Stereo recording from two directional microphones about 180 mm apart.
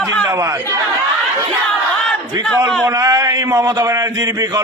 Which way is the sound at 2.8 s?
20° right (ahead or behind).